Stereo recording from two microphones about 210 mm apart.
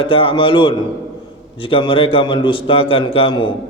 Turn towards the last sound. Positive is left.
turn(degrees=25)  # may be behind; listen again after turning